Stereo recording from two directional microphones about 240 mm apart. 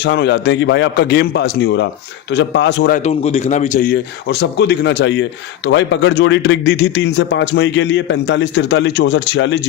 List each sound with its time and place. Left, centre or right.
0.0 s speech: left
3.0 s a man's voice: left